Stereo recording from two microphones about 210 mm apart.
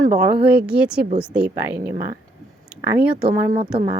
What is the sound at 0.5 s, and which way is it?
Speech, 5° right (ahead or behind).